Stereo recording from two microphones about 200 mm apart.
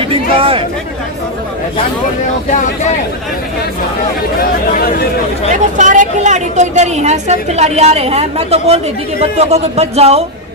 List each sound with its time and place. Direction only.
0.1 s chatter: 30° right (ahead or behind)
4.4 s speech: 50° left (ahead or behind)
5.7 s a woman's voice: 40° right (ahead or behind)